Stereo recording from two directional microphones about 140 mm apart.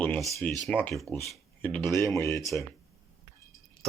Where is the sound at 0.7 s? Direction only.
10° left (ahead or behind).